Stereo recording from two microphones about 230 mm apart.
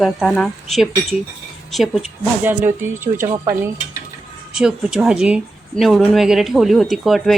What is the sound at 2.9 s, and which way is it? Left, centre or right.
Speech, right.